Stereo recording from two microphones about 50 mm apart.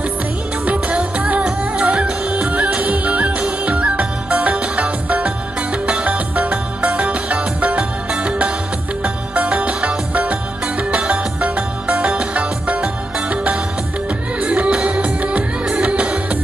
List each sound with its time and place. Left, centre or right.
1.1 s music: right
1.4 s music: centre